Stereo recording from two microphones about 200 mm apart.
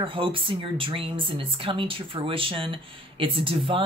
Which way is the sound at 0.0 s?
25° right (ahead or behind).